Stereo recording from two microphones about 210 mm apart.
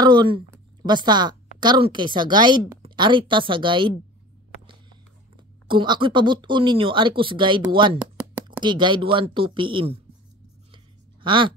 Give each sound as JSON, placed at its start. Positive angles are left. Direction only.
{"t": 0.0, "sound": "a sound", "side_deg": -20}
{"t": 0.5, "sound": "a woman's voice", "side_deg": -20}
{"t": 5.7, "sound": "speech", "side_deg": -25}
{"t": 8.0, "sound": "a sound", "side_deg": -5}
{"t": 8.5, "sound": "speech", "side_deg": -20}
{"t": 11.2, "sound": "speech", "side_deg": -25}